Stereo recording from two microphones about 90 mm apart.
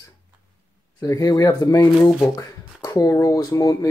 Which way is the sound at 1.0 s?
40° left (ahead or behind).